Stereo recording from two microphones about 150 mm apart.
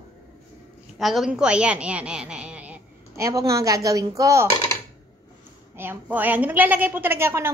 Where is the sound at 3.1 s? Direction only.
20° right (ahead or behind).